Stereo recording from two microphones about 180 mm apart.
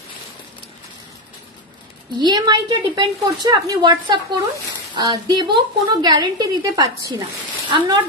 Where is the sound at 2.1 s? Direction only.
25° right (ahead or behind).